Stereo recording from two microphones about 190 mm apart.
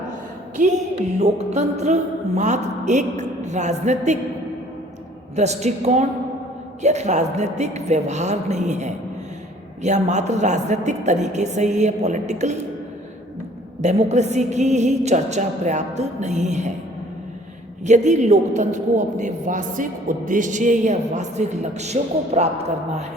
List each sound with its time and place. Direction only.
0.5 s a woman's voice: 40° right (ahead or behind)
5.4 s a woman's voice: 35° right (ahead or behind)
13.8 s a woman's voice: 35° right (ahead or behind)
17.8 s a woman's voice: 40° right (ahead or behind)